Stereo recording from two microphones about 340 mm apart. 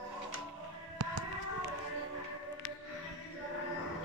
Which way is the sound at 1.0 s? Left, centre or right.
Right.